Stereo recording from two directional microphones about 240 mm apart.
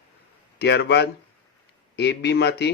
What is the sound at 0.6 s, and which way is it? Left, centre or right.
Speech, left.